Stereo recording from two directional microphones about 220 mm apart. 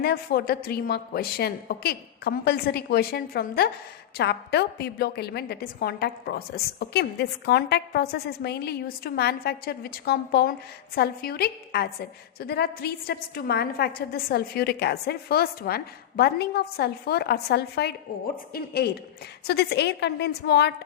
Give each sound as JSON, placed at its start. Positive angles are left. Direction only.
{"t": 0.0, "sound": "a woman's voice", "side_deg": 45}